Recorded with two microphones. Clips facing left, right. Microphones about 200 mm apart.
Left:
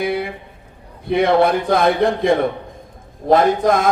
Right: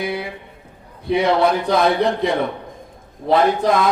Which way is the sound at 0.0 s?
55° left (ahead or behind).